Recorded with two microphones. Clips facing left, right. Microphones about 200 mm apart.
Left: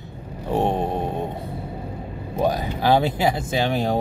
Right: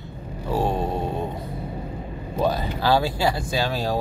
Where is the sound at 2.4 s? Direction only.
15° left (ahead or behind).